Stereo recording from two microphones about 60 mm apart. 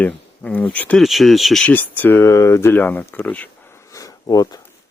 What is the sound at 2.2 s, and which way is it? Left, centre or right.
Speech, left.